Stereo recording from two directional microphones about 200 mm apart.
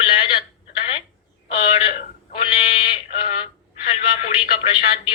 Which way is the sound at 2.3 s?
25° left (ahead or behind).